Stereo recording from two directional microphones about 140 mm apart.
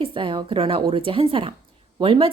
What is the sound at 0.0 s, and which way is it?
Speech, 35° right (ahead or behind).